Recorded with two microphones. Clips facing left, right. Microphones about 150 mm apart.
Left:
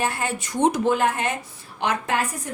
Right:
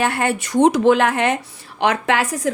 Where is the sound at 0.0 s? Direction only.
70° right (ahead or behind).